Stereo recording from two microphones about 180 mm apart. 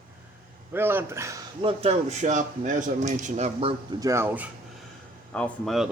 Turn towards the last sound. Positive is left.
turn(degrees=0)  # may be behind; listen again after turning